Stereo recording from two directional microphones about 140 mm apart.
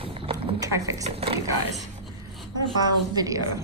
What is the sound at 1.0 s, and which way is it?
Speech, 45° right (ahead or behind).